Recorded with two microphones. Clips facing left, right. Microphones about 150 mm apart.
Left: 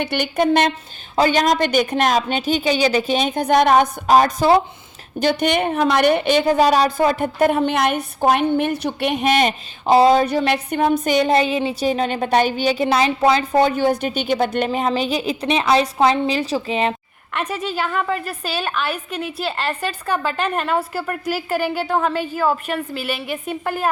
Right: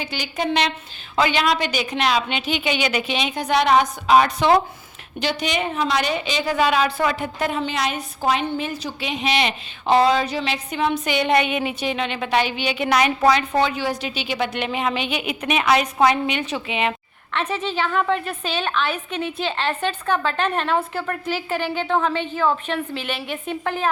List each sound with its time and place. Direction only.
0.0 s a woman's voice: 60° left (ahead or behind); by 4.5 s 40° left (ahead or behind)
5.2 s a woman's voice: 55° left (ahead or behind)
11.3 s a woman's voice: 30° left (ahead or behind)
13.6 s a woman's voice: 45° left (ahead or behind)
17.3 s a woman's voice: 10° left (ahead or behind)